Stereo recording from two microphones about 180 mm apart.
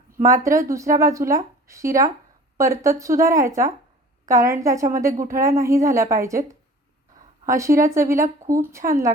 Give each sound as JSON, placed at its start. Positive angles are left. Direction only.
{"t": 0.3, "sound": "a woman's voice", "side_deg": -15}